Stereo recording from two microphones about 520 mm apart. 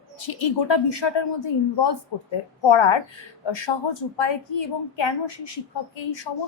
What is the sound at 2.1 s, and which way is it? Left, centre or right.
Speech, left.